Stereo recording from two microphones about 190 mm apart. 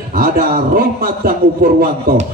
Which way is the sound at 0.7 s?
50° right (ahead or behind).